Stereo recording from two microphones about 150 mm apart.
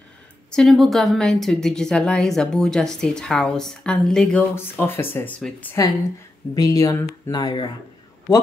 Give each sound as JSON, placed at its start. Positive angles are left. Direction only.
{"t": 0.5, "sound": "speech", "side_deg": 5}
{"t": 6.5, "sound": "speech", "side_deg": 25}